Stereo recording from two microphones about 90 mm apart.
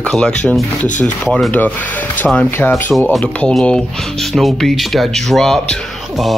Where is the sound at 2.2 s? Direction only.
Centre (ahead or behind).